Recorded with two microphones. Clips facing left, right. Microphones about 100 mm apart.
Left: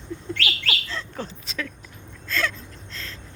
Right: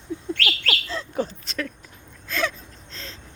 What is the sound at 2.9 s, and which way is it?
Vehicle, 65° left (ahead or behind).